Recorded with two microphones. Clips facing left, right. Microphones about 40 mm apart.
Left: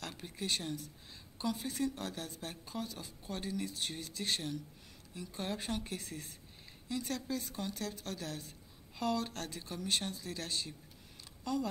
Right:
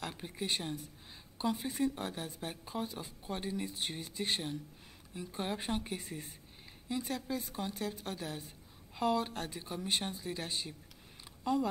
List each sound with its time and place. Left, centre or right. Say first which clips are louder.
0.0 s speech: right 2 dB; centre